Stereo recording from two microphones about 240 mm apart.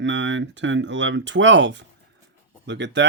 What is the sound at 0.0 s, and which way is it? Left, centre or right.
Speech, right.